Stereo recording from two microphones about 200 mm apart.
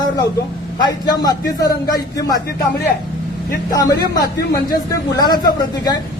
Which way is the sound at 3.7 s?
20° left (ahead or behind).